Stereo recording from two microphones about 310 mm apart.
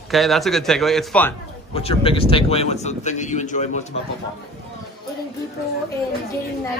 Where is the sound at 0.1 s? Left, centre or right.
Centre.